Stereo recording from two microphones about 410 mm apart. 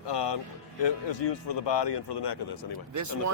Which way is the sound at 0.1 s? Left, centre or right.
Left.